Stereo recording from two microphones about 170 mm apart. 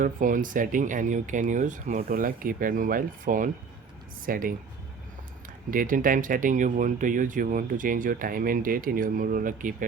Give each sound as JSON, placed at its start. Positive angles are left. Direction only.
{"t": 0.0, "sound": "speech", "side_deg": -50}
{"t": 5.7, "sound": "speech", "side_deg": -55}